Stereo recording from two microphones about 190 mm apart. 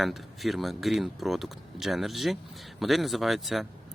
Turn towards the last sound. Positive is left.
turn(degrees=0)  # may be behind; listen again after turning